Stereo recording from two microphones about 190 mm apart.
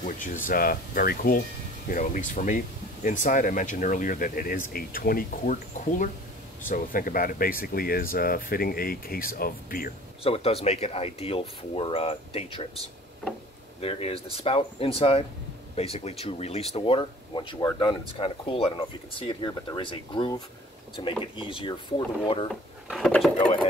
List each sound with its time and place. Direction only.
0.0 s speech: 45° left (ahead or behind)
10.2 s speech: 30° left (ahead or behind)
13.7 s speech: 30° left (ahead or behind)
22.5 s speech: centre (ahead or behind)